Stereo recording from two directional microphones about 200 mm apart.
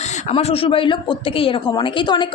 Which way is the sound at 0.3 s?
30° left (ahead or behind).